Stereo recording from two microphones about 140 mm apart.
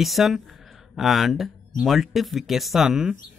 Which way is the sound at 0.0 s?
Centre (ahead or behind).